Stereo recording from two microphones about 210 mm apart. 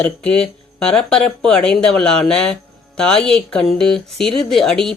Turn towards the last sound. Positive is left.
turn(degrees=0)  # may be behind; listen again after turning